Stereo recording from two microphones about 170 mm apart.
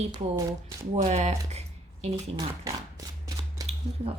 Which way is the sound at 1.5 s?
40° right (ahead or behind).